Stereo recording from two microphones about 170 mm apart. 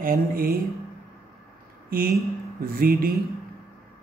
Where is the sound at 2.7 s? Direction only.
60° right (ahead or behind).